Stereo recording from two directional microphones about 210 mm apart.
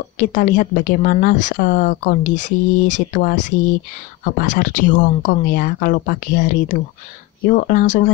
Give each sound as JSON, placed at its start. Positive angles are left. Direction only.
{"t": 0.2, "sound": "speech", "side_deg": 40}